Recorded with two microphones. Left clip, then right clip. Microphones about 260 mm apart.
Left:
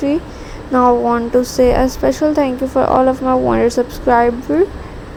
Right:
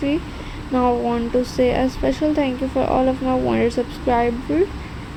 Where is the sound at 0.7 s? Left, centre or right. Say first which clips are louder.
Left 7 dB; left.